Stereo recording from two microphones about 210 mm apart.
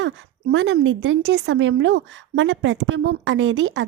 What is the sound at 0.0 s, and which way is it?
A woman's voice, 60° right (ahead or behind).